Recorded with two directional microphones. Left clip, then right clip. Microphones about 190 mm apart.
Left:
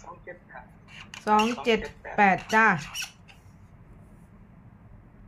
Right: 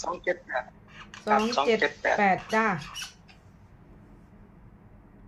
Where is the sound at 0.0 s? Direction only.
70° right (ahead or behind).